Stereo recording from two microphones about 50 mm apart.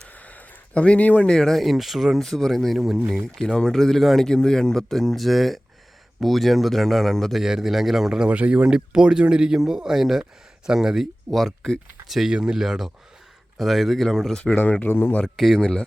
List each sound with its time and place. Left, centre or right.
0.1 s a sound: left
1.3 s speech: centre
1.6 s speech: centre
3.4 s speech: centre
7.3 s speech: centre
8.3 s speech: right; by 12.3 s centre
12.3 s speech: centre
12.6 s speech: centre
14.5 s speech: left
15.4 s speech: centre